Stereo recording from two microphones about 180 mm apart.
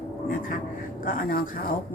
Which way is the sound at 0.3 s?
50° left (ahead or behind).